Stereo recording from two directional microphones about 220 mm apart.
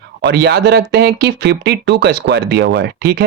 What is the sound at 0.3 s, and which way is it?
Speech, 50° right (ahead or behind).